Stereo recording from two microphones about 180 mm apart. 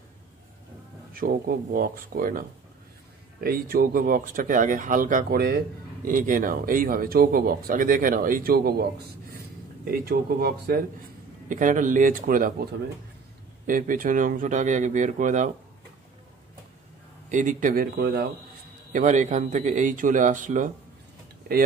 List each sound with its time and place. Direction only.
1.1 s speech: 55° right (ahead or behind)
3.4 s speech: 55° right (ahead or behind)
11.4 s speech: 45° right (ahead or behind)
13.7 s speech: 50° right (ahead or behind)
17.3 s speech: 45° right (ahead or behind)
18.9 s speech: 45° right (ahead or behind)